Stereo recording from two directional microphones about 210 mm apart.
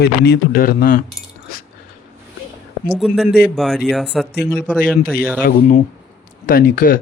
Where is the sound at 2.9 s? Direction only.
Centre (ahead or behind).